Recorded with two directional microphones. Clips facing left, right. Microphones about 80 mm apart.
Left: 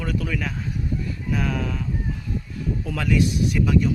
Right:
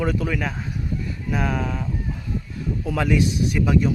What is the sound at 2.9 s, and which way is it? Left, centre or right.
Speech, right.